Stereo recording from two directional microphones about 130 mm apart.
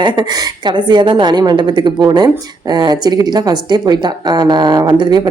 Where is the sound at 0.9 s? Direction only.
35° right (ahead or behind).